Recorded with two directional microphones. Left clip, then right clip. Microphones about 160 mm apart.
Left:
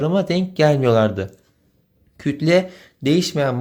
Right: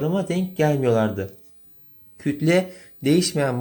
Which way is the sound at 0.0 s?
25° left (ahead or behind).